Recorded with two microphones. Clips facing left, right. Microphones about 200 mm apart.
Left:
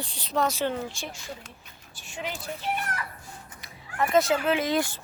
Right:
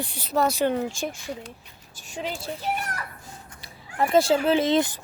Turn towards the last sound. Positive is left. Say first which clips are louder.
# right 4 dB
turn(degrees=-20)  # may be behind; listen again after turning